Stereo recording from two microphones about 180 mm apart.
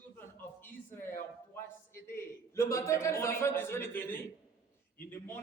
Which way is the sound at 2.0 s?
15° left (ahead or behind).